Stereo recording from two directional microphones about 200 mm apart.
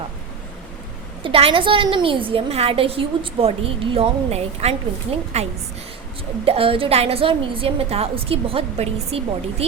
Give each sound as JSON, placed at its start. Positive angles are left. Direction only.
{"t": 1.2, "sound": "a woman's voice", "side_deg": -25}